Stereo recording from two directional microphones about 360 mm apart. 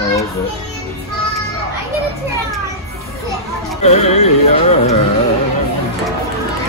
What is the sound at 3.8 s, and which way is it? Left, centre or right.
A woman's voice, centre.